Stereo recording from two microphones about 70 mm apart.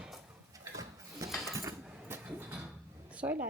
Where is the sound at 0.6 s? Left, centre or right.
Right.